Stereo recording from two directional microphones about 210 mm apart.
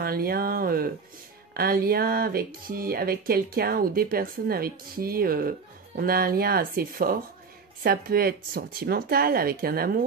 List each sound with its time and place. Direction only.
0.0 s speech: 45° right (ahead or behind)